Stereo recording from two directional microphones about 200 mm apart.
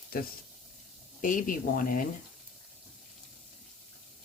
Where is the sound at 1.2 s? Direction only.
45° left (ahead or behind).